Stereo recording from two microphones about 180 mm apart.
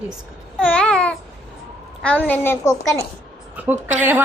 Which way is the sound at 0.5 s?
5° left (ahead or behind).